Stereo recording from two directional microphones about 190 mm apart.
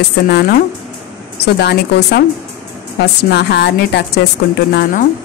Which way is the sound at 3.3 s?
60° left (ahead or behind).